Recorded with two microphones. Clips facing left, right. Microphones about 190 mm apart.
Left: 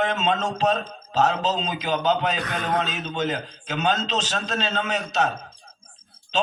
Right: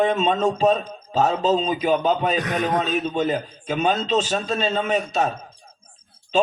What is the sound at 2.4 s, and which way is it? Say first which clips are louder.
Speech: right 4 dB; 20° right (ahead or behind).